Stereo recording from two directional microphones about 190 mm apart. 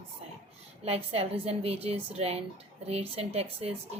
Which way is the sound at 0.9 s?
30° right (ahead or behind).